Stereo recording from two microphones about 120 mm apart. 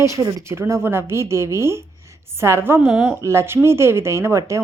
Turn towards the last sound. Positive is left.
turn(degrees=-25)  # may be behind; listen again after turning